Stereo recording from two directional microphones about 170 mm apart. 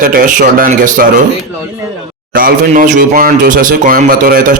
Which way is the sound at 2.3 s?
55° right (ahead or behind).